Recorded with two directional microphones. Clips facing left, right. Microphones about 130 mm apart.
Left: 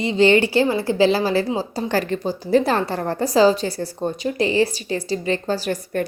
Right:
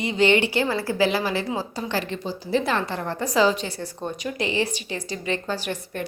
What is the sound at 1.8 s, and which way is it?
A woman's voice, 45° left (ahead or behind).